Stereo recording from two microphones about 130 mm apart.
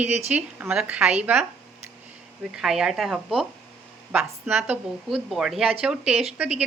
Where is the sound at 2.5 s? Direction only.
5° right (ahead or behind).